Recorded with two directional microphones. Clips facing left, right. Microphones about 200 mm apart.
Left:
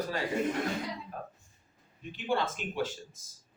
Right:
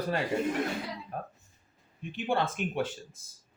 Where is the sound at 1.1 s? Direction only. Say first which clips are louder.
Right 3 dB; 55° right (ahead or behind).